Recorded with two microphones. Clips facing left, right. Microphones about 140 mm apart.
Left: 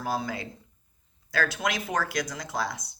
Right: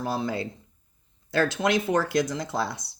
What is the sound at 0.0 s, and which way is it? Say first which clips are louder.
Speech: right 3 dB; 25° right (ahead or behind).